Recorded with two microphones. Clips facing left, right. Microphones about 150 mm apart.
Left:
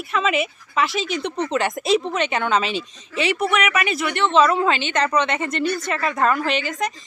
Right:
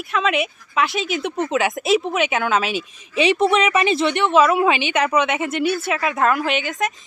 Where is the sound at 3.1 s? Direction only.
20° right (ahead or behind).